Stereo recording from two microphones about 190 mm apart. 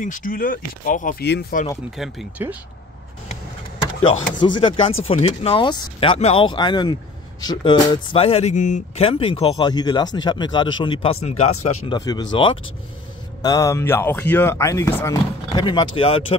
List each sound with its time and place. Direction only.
0.0 s speech: 45° left (ahead or behind)
2.0 s speech: 5° right (ahead or behind)
4.6 s speech: 25° left (ahead or behind)